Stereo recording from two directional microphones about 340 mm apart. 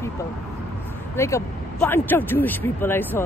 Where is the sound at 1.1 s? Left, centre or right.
Centre.